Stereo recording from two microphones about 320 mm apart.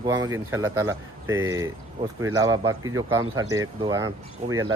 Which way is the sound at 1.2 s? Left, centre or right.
Right.